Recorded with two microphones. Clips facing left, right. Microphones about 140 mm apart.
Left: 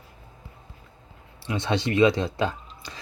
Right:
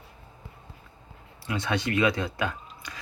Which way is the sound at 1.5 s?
25° left (ahead or behind).